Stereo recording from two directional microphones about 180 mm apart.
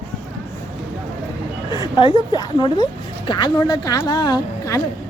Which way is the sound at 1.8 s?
25° left (ahead or behind).